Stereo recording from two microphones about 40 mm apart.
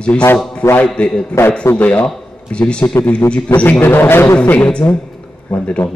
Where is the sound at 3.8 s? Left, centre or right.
Left.